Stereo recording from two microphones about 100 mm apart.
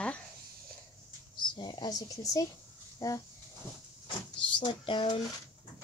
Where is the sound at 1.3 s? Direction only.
50° left (ahead or behind); by 3.2 s 35° left (ahead or behind).